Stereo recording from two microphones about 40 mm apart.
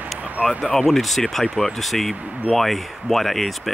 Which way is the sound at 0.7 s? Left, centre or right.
Centre.